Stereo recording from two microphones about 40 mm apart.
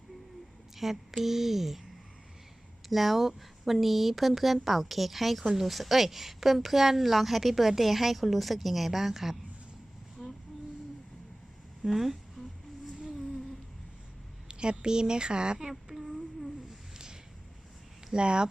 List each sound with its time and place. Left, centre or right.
0.8 s speech: centre
2.9 s speech: centre
10.2 s vehicle: centre
11.9 s speech: centre
14.4 s a woman's voice: right
15.9 s a sound: centre
18.1 s a woman's voice: right